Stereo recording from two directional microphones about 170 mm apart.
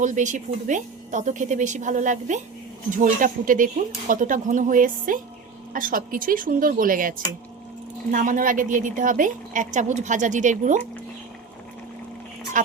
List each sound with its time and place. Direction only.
0.0 s a woman's voice: 45° right (ahead or behind)
12.6 s a woman's voice: 50° right (ahead or behind)